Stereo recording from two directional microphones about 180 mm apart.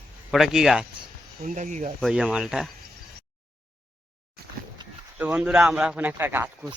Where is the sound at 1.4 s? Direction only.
45° right (ahead or behind).